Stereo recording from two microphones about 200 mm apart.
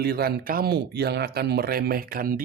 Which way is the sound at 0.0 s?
50° right (ahead or behind).